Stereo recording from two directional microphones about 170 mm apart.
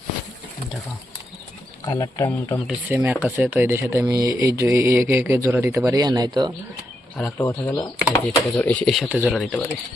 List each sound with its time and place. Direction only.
1.8 s speech: 20° left (ahead or behind)
2.6 s speech: 10° right (ahead or behind)
7.3 s speech: 15° left (ahead or behind)